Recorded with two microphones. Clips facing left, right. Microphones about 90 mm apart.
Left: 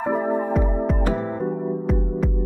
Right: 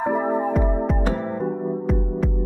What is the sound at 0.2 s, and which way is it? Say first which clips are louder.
Music: even; 20° right (ahead or behind).